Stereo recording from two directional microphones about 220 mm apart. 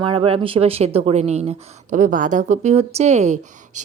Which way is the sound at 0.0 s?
25° right (ahead or behind).